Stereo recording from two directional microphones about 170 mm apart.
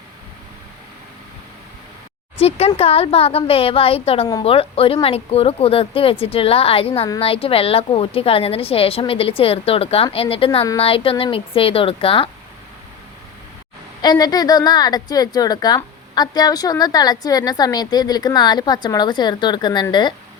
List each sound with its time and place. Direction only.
2.4 s a woman's voice: 35° left (ahead or behind)
14.0 s a woman's voice: 25° left (ahead or behind)